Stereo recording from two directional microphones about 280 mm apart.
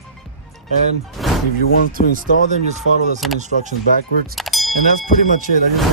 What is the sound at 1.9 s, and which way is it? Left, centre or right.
Speech, right.